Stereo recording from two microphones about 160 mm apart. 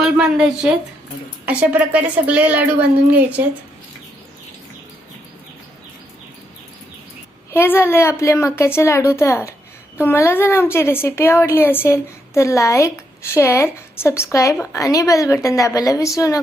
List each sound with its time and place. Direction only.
0.0 s a woman's voice: 5° right (ahead or behind)
7.5 s a woman's voice: 15° left (ahead or behind)